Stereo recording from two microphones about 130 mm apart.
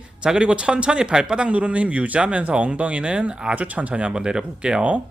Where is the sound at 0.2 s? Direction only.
5° right (ahead or behind).